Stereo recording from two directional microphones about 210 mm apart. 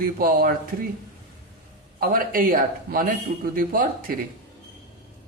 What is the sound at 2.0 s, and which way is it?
A man's voice, 45° right (ahead or behind).